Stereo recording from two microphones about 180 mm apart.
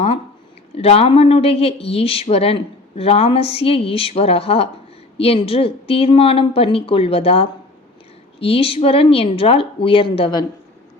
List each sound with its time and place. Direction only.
0.8 s speech: 30° left (ahead or behind)